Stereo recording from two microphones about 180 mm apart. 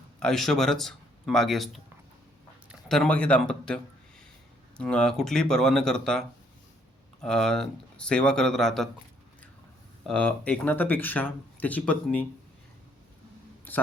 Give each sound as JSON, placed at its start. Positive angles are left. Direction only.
{"t": 0.2, "sound": "speech", "side_deg": 5}
{"t": 4.8, "sound": "speech", "side_deg": 5}
{"t": 10.1, "sound": "speech", "side_deg": 5}
{"t": 13.7, "sound": "a sound", "side_deg": 10}